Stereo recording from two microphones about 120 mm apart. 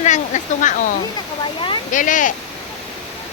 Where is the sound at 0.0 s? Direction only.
90° left.